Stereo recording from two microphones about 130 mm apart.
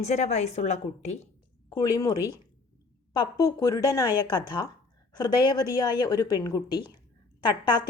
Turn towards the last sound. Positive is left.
turn(degrees=35)  # may be behind; listen again after turning